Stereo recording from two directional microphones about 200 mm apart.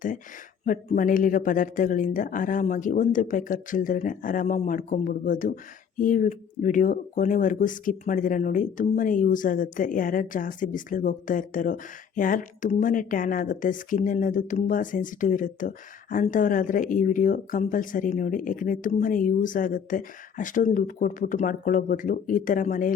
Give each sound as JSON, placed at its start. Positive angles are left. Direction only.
{"t": 0.6, "sound": "speech", "side_deg": 40}